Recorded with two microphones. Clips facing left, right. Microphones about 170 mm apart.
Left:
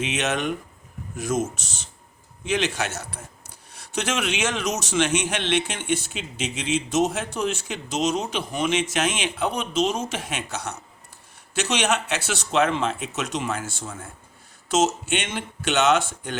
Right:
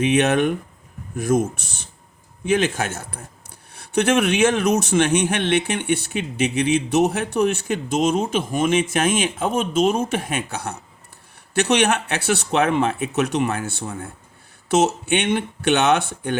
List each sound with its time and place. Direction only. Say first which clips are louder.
0.0 s a man's voice: right 8 dB; 55° right (ahead or behind)